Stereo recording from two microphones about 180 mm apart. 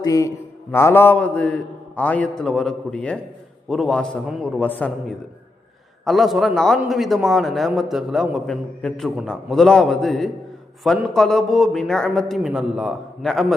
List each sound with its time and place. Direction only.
0.0 s mantra: 20° left (ahead or behind)
2.0 s a man's voice: 5° left (ahead or behind)